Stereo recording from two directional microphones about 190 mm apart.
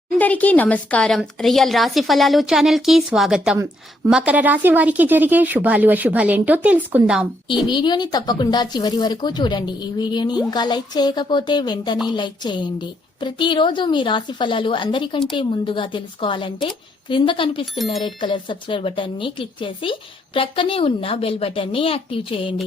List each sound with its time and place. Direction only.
0.2 s a woman's voice: 10° left (ahead or behind)
7.7 s speech: 25° left (ahead or behind)